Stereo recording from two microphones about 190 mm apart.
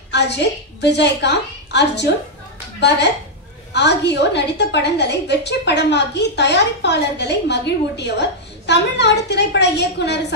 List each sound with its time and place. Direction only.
0.1 s a woman's voice: 65° left (ahead or behind)
3.7 s a woman's voice: 65° left (ahead or behind)